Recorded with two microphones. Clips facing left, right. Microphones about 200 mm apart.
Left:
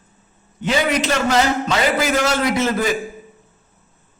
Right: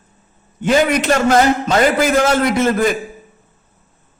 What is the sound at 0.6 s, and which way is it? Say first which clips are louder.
A man's voice: right 5 dB; 50° right (ahead or behind).